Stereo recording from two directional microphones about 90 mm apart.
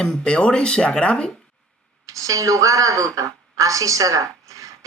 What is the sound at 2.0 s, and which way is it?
A woman's voice, 40° right (ahead or behind).